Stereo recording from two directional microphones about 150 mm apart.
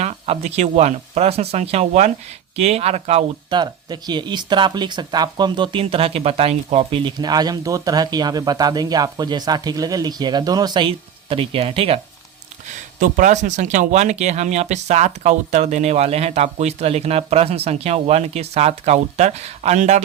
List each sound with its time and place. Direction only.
0.0 s speech: 45° right (ahead or behind)
3.5 s speech: 30° right (ahead or behind); by 7.0 s 45° right (ahead or behind)
7.0 s speech: 25° right (ahead or behind)
12.6 s speech: 55° right (ahead or behind)